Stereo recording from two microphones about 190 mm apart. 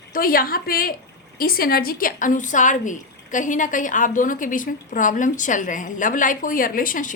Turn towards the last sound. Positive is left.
turn(degrees=45)  # may be behind; listen again after turning